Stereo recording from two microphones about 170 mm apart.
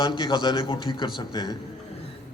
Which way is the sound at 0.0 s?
30° left (ahead or behind).